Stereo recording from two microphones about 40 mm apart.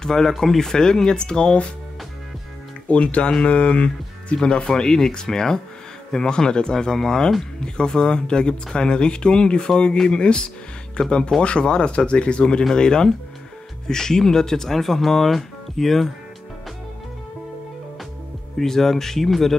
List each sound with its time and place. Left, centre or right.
0.0 s speech: centre
2.9 s speech: left
4.4 s speech: centre
18.6 s speech: centre